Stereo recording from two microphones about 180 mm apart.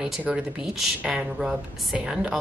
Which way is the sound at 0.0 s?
5° right (ahead or behind).